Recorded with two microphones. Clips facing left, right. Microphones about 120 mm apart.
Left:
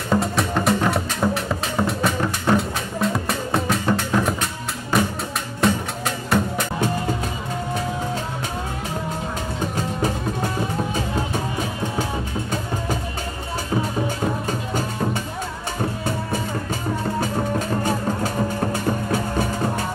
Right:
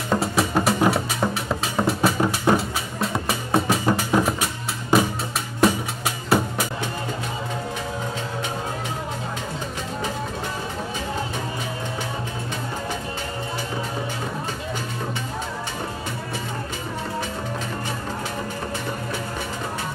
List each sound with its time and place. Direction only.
0.1 s music: centre (ahead or behind)
5.6 s music: 5° right (ahead or behind)
17.8 s music: 45° left (ahead or behind)